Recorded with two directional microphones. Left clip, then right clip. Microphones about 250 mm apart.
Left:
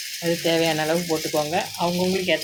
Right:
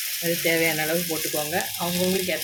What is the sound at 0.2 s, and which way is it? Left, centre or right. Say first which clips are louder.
Speech: left 2 dB; centre.